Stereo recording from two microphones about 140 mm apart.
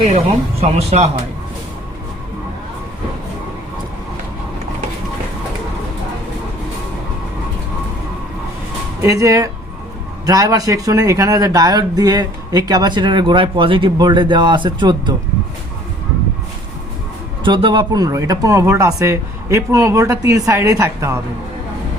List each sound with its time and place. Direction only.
0.6 s speech: 50° right (ahead or behind)
9.0 s speech: 25° right (ahead or behind)
17.4 s speech: 35° right (ahead or behind)